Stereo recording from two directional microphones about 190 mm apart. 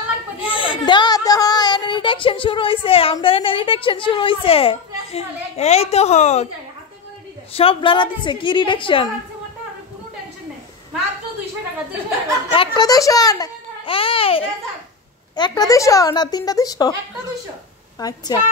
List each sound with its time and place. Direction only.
0.4 s speech: 25° left (ahead or behind)
7.5 s a child's voice: 25° left (ahead or behind)
12.4 s a child's voice: 25° left (ahead or behind)
17.9 s a child's voice: 20° left (ahead or behind)